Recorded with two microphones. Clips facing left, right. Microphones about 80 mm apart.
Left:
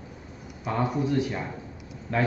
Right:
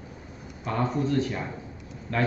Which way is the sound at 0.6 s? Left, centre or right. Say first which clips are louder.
Even; centre.